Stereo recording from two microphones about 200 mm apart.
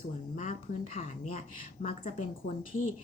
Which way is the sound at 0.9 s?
30° left (ahead or behind).